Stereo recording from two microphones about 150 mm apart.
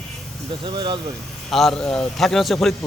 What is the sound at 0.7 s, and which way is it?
Speech, 30° right (ahead or behind).